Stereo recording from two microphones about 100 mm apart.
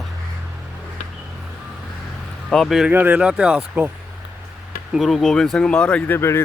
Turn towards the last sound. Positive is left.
turn(degrees=25)  # may be behind; listen again after turning